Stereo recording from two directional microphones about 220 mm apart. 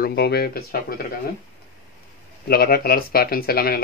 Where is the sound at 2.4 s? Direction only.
45° left (ahead or behind).